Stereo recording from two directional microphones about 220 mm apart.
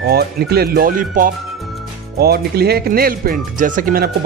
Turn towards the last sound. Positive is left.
turn(degrees=-40)  # may be behind; listen again after turning